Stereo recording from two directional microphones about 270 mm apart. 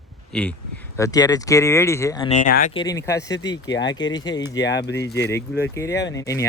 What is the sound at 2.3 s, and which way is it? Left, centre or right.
Speech, left.